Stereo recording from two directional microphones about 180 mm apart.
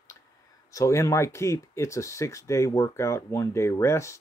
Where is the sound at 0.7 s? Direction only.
15° left (ahead or behind).